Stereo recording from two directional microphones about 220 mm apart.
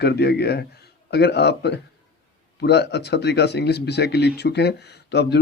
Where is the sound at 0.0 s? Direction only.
50° left (ahead or behind).